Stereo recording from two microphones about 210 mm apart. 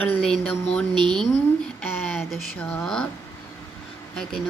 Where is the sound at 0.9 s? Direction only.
20° right (ahead or behind).